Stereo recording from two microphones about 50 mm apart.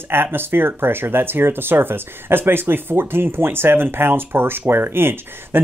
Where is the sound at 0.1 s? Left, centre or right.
Right.